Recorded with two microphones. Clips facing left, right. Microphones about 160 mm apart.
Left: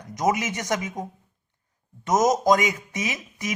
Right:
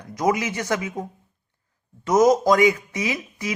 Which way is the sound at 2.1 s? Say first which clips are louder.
Right 3 dB; 20° left (ahead or behind).